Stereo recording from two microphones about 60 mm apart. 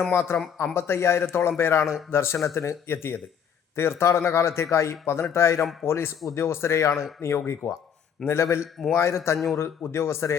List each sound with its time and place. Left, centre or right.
0.1 s a man's voice: left